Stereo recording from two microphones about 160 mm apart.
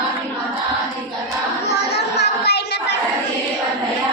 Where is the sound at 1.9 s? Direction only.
90° left.